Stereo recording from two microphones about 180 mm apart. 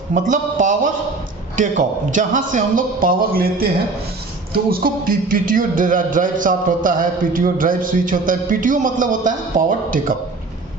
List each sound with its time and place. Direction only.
0.1 s speech: 45° right (ahead or behind)